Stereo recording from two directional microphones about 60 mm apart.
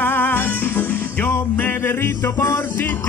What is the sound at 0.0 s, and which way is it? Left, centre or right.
Music, left.